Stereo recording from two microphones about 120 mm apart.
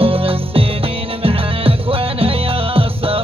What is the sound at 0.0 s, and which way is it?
Music, 50° right (ahead or behind).